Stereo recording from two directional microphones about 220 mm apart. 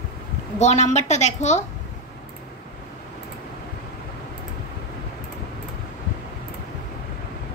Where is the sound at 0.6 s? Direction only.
30° left (ahead or behind).